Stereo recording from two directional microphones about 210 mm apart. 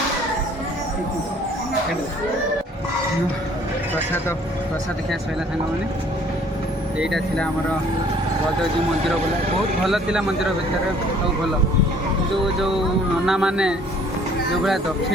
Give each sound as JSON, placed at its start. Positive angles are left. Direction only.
{"t": 7.0, "sound": "speech", "side_deg": 0}
{"t": 9.8, "sound": "speech", "side_deg": 0}
{"t": 13.2, "sound": "speech", "side_deg": -5}